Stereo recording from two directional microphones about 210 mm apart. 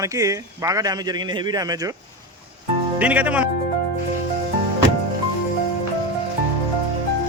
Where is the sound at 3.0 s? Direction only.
5° right (ahead or behind).